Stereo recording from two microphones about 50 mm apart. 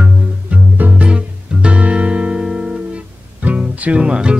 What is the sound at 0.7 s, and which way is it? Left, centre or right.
Music, right.